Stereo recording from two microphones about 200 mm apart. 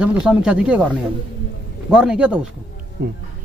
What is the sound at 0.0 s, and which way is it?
Speech, 5° right (ahead or behind).